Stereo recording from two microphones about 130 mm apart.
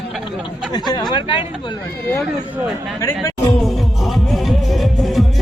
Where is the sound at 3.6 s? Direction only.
Centre (ahead or behind).